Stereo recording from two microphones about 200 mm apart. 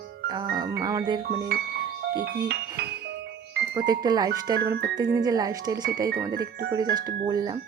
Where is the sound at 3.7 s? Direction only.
20° right (ahead or behind).